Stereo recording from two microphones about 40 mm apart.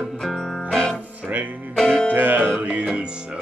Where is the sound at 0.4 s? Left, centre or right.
Centre.